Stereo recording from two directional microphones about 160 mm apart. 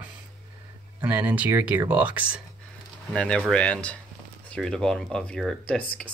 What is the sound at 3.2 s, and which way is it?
Speech, 5° left (ahead or behind).